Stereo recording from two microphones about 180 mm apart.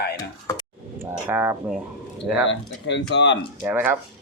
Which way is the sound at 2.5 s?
85° left.